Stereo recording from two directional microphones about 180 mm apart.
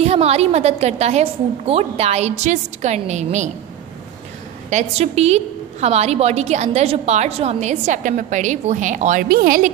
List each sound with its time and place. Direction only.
0.0 s a woman's voice: 35° right (ahead or behind)
4.6 s a woman's voice: 40° right (ahead or behind)